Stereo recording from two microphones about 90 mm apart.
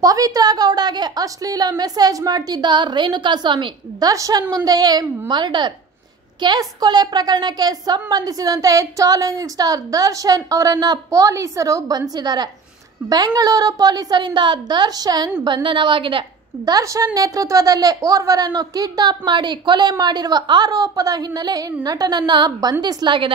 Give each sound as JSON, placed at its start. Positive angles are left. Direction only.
{"t": 0.0, "sound": "a woman's voice", "side_deg": -45}
{"t": 4.0, "sound": "a woman's voice", "side_deg": -40}
{"t": 5.3, "sound": "a woman's voice", "side_deg": -60}
{"t": 15.4, "sound": "a woman's voice", "side_deg": -65}
{"t": 16.6, "sound": "a woman's voice", "side_deg": -40}